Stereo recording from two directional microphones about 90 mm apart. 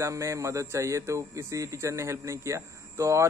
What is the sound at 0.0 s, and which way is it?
Speech, 35° right (ahead or behind).